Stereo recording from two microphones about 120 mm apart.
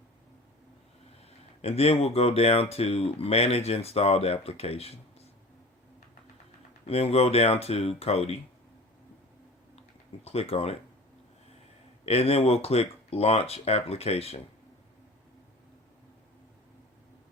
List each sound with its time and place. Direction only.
1.2 s speech: 55° left (ahead or behind)
6.8 s speech: 55° left (ahead or behind)
10.2 s speech: 55° left (ahead or behind)
12.0 s speech: 55° left (ahead or behind)